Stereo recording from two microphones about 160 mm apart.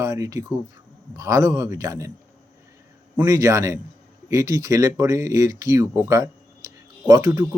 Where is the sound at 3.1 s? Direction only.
20° right (ahead or behind).